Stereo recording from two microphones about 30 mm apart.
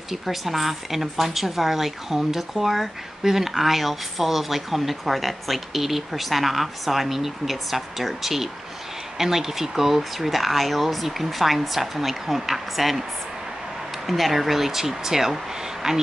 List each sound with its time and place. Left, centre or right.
0.1 s speech: centre
14.0 s speech: centre